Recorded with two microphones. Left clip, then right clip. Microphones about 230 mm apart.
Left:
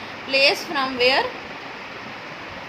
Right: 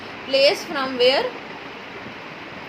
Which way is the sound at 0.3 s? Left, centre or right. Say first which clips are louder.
Right 1 dB; left.